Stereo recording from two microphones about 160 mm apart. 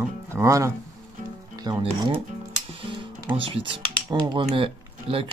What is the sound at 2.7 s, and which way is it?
Music, 30° right (ahead or behind).